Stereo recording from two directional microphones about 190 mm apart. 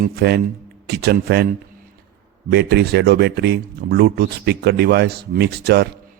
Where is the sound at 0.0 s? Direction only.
55° right (ahead or behind).